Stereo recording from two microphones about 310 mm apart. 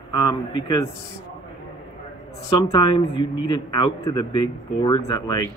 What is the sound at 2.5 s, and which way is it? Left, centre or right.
Speech, centre.